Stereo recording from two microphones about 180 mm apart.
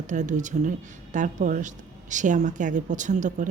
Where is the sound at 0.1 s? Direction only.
45° right (ahead or behind).